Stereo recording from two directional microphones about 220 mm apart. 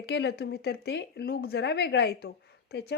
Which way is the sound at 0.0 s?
50° left (ahead or behind).